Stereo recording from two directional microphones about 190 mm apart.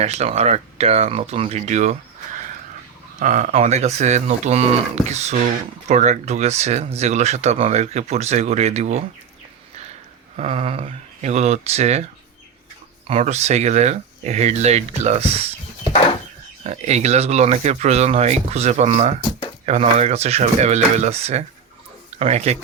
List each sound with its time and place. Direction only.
0.0 s speech: 35° right (ahead or behind)
10.3 s speech: 35° right (ahead or behind)
13.1 s speech: 35° right (ahead or behind)
16.6 s speech: 35° right (ahead or behind)